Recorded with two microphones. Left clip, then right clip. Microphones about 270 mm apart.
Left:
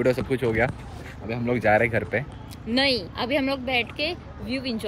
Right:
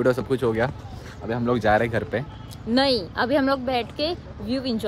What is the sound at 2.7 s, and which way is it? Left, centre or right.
Speech, centre.